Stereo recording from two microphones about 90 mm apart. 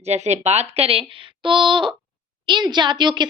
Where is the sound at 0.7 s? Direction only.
90° right.